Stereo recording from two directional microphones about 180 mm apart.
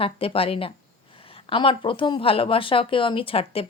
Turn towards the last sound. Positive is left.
turn(degrees=30)  # may be behind; listen again after turning